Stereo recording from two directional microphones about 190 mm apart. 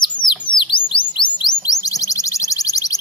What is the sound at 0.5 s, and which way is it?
Chirp, centre (ahead or behind).